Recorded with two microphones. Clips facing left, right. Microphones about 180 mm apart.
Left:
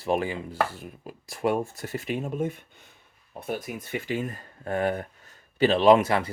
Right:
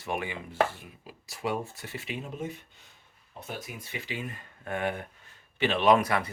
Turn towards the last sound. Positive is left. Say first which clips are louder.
# left 5 dB
turn(degrees=30)  # may be behind; listen again after turning